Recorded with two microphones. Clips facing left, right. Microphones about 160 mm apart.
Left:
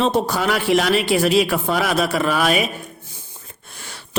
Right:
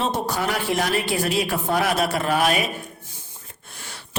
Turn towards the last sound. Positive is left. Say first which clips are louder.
# left 6 dB
turn(degrees=90)